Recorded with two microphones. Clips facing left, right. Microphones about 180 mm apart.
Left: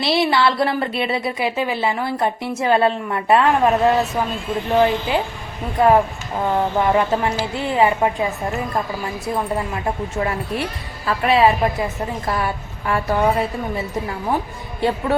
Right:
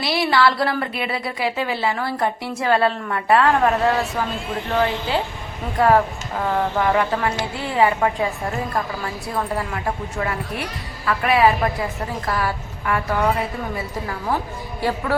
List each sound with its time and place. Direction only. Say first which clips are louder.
0.0 s a woman's voice: left 1 dB; 25° left (ahead or behind)